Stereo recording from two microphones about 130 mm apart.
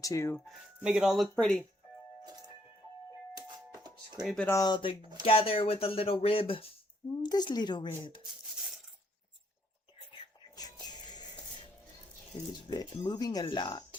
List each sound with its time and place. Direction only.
0.0 s speech: 25° left (ahead or behind)
0.4 s speech: 5° right (ahead or behind)
3.3 s music: 30° right (ahead or behind)
4.4 s speech: 20° left (ahead or behind)
4.6 s speech: 40° left (ahead or behind)
7.2 s speech: 35° left (ahead or behind)
10.5 s music: 30° left (ahead or behind)
12.3 s speech: 40° left (ahead or behind)